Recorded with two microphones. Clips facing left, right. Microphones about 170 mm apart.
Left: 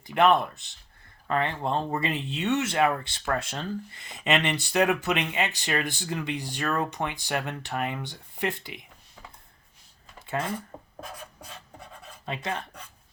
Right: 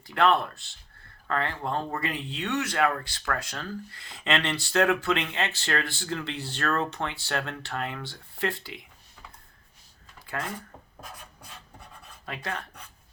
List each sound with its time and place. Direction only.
0.1 s speech: 20° left (ahead or behind)
10.2 s a sound: 25° left (ahead or behind)
12.2 s speech: 20° left (ahead or behind)